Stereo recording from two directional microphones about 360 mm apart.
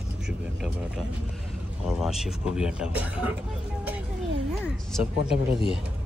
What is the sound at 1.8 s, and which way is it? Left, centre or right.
Speech, centre.